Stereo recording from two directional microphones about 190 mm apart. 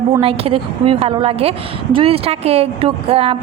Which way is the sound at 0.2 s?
30° right (ahead or behind).